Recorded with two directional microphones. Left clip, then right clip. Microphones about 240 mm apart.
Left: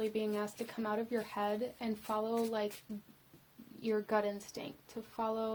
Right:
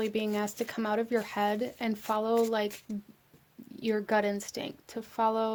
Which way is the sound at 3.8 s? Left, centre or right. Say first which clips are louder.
Right 5 dB; right.